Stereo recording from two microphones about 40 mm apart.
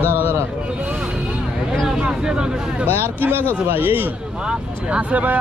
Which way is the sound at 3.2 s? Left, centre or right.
Right.